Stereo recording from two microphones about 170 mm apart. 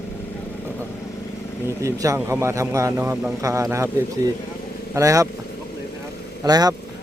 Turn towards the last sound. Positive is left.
turn(degrees=-25)  # may be behind; listen again after turning